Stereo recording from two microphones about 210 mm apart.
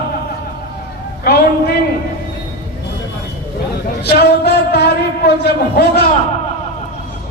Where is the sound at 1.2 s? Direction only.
45° left (ahead or behind).